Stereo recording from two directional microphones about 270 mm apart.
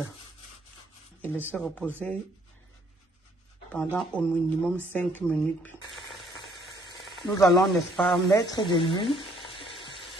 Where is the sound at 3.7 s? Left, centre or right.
Centre.